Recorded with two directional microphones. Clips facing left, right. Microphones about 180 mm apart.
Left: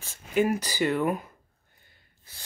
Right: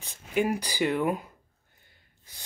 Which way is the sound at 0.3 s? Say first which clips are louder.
Left 2 dB; 15° right (ahead or behind).